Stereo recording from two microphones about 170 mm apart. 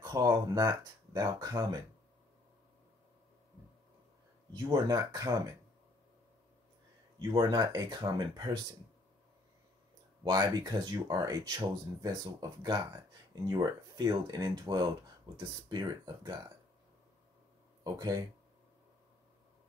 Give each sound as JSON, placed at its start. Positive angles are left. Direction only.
{"t": 0.0, "sound": "speech", "side_deg": -20}
{"t": 4.6, "sound": "speech", "side_deg": -15}
{"t": 7.2, "sound": "speech", "side_deg": -20}
{"t": 10.4, "sound": "speech", "side_deg": -25}
{"t": 17.8, "sound": "speech", "side_deg": -20}